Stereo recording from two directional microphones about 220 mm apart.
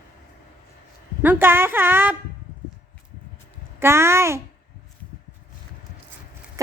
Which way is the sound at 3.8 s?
10° right (ahead or behind).